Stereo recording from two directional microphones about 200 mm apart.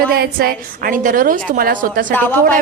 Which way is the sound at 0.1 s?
50° right (ahead or behind).